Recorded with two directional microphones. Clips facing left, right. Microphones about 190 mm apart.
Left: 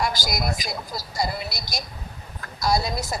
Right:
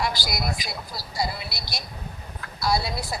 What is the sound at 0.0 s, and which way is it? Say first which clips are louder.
A woman's voice: left 2 dB; 45° left (ahead or behind).